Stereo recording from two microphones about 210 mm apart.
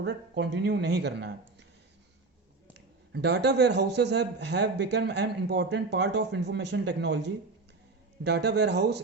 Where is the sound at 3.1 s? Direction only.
55° right (ahead or behind).